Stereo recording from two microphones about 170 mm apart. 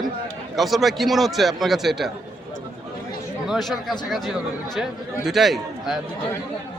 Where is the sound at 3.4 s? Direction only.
Centre (ahead or behind).